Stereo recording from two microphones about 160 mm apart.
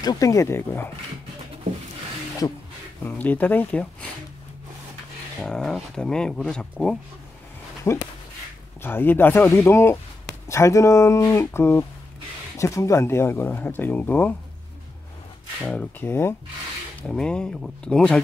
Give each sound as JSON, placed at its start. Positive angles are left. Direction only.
{"t": 0.0, "sound": "speech", "side_deg": 20}
{"t": 3.0, "sound": "speech", "side_deg": 10}
{"t": 5.4, "sound": "speech", "side_deg": 5}
{"t": 7.8, "sound": "speech", "side_deg": 15}
{"t": 15.6, "sound": "speech", "side_deg": 5}
{"t": 17.0, "sound": "speech", "side_deg": 5}